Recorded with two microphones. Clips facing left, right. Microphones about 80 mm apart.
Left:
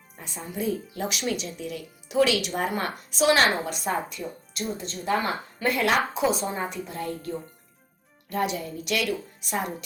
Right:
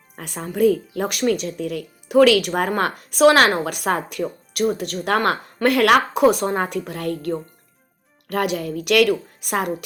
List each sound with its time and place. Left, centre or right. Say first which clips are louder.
0.2 s speech: right 13 dB; right